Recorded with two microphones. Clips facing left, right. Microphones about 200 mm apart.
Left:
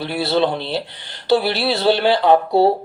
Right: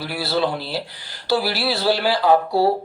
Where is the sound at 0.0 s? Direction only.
25° left (ahead or behind).